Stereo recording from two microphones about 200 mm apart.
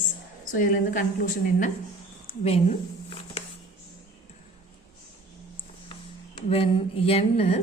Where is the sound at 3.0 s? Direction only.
25° left (ahead or behind).